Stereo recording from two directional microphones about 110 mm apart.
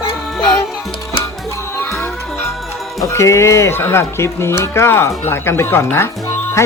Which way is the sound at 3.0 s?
25° left (ahead or behind).